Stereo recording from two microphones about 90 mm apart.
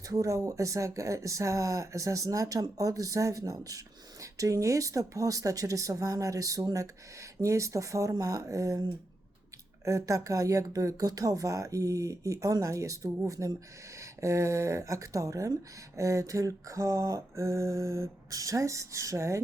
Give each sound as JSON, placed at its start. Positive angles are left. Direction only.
{"t": 0.1, "sound": "speech", "side_deg": -40}
{"t": 9.8, "sound": "speech", "side_deg": -35}